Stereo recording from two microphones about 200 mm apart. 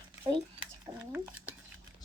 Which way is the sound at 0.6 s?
10° right (ahead or behind).